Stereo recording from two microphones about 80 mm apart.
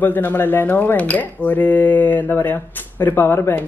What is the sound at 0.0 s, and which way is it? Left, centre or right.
Speech, left.